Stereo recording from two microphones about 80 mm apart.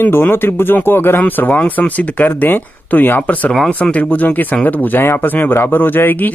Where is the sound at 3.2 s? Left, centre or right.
Centre.